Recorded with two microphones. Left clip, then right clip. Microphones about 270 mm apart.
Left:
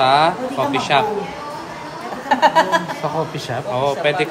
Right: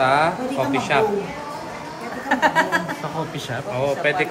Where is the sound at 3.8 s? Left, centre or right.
Centre.